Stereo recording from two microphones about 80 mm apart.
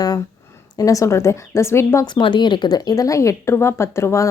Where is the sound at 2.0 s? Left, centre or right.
Left.